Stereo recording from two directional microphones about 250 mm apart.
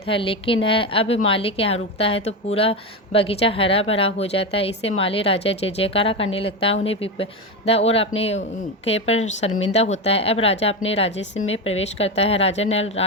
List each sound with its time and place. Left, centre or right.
0.0 s a woman's voice: left